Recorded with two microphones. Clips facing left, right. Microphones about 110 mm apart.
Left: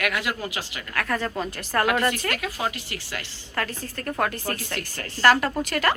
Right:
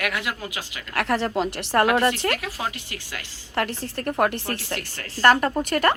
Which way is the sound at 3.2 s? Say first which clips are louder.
Right 4 dB; 20° right (ahead or behind).